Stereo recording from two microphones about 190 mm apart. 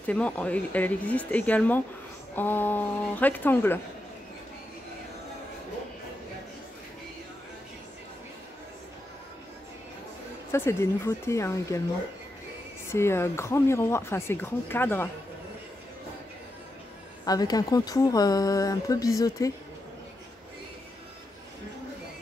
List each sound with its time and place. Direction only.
0.0 s speech: 5° left (ahead or behind)
10.5 s speech: 15° left (ahead or behind)
12.9 s speech: 15° left (ahead or behind)
17.2 s speech: 20° left (ahead or behind)